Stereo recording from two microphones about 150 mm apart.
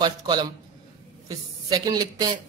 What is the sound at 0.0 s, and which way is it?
Speech, 30° right (ahead or behind).